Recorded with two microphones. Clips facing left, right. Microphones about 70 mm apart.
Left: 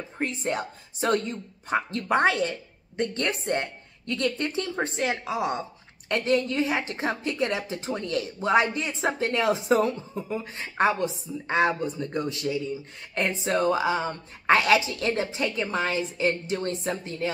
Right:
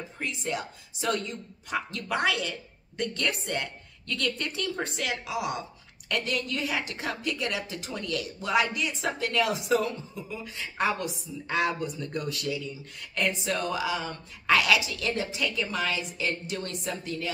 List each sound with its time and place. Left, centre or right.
0.2 s a woman's voice: left